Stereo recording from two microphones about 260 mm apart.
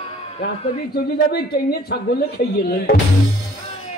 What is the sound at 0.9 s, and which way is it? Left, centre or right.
A woman's voice, left.